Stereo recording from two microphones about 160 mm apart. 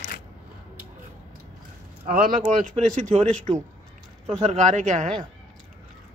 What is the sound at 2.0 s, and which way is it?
A man's voice, 60° right (ahead or behind).